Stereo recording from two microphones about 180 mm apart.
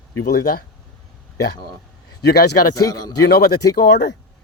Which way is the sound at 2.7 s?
20° left (ahead or behind).